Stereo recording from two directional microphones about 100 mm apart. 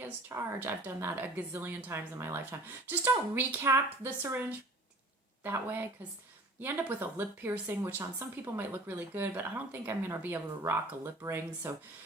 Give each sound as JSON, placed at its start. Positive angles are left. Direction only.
{"t": 0.0, "sound": "speech", "side_deg": -25}